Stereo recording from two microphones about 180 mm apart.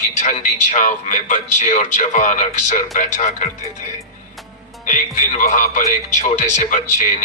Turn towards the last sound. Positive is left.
turn(degrees=45)  # may be behind; listen again after turning